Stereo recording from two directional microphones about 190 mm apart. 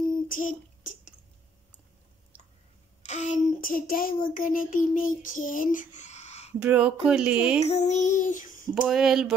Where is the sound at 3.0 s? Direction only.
40° left (ahead or behind).